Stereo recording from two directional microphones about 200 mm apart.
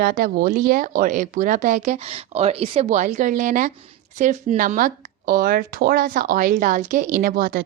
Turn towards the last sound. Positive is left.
turn(degrees=-50)  # may be behind; listen again after turning